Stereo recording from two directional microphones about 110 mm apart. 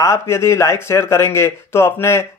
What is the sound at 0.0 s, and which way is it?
Speech, 25° left (ahead or behind).